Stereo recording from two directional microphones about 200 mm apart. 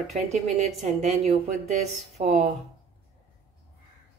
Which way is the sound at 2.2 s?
35° right (ahead or behind).